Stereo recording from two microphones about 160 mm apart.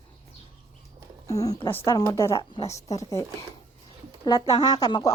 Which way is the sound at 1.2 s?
20° left (ahead or behind).